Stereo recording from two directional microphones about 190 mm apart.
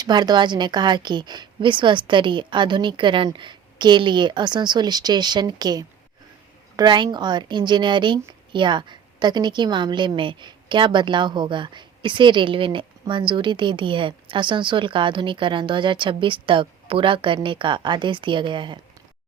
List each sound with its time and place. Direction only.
0.0 s a woman's voice: 20° right (ahead or behind)